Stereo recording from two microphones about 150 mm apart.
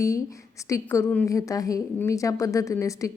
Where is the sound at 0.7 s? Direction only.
20° left (ahead or behind).